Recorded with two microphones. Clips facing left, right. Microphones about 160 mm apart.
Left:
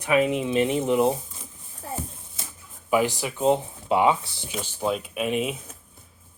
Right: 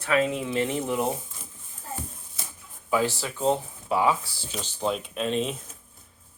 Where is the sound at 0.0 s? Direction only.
15° left (ahead or behind).